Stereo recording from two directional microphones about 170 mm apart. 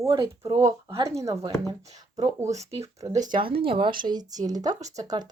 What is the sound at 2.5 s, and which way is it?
Speech, 40° right (ahead or behind).